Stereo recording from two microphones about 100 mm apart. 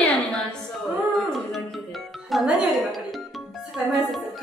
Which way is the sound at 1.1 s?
Centre (ahead or behind).